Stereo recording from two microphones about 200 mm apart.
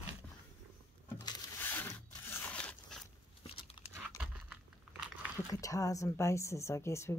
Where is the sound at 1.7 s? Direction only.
10° left (ahead or behind).